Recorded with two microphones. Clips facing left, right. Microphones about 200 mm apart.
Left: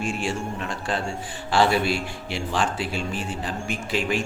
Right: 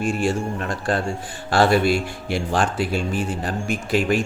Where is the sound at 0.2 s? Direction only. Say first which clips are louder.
Right 5 dB; 40° right (ahead or behind).